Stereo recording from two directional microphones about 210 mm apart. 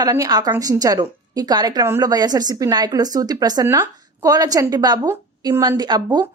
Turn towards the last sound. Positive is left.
turn(degrees=-20)  # may be behind; listen again after turning